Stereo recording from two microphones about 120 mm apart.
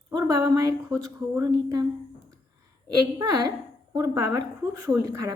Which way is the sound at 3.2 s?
30° right (ahead or behind).